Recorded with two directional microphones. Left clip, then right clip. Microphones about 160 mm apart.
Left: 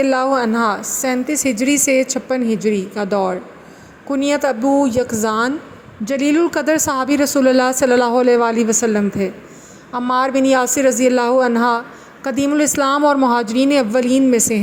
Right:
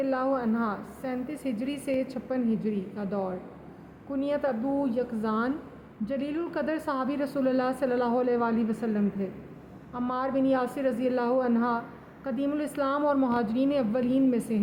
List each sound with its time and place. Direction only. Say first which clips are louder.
0.0 s a woman's voice: left 12 dB; 50° left (ahead or behind)